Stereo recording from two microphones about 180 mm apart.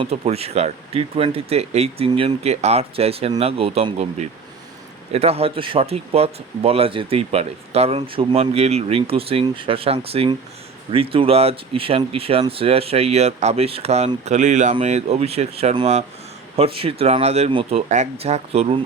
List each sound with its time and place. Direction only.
0.0 s speech: 35° right (ahead or behind)